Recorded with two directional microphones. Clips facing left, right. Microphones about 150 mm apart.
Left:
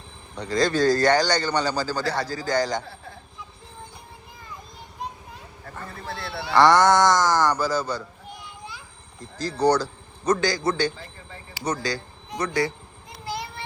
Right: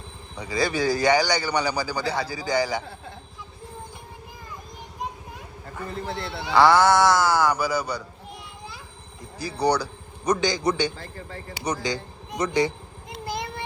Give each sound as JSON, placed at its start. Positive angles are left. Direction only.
{"t": 0.3, "sound": "speech", "side_deg": -10}
{"t": 6.1, "sound": "speech", "side_deg": -20}
{"t": 6.5, "sound": "speech", "side_deg": -10}
{"t": 9.4, "sound": "speech", "side_deg": -10}